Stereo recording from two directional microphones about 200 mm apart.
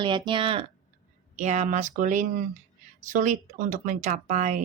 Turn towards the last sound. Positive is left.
turn(degrees=-40)  # may be behind; listen again after turning